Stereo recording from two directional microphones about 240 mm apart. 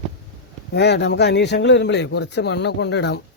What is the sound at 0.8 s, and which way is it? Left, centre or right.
A man's voice, left.